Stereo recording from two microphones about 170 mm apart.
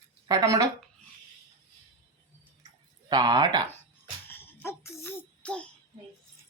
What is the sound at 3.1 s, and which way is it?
Speech, 25° right (ahead or behind).